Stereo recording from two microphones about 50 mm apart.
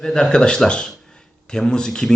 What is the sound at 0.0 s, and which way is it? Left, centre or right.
Speech, centre.